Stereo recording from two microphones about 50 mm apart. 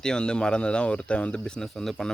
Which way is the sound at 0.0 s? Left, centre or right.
Centre.